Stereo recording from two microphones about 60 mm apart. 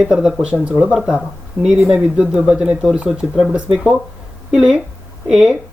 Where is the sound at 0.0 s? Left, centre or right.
Centre.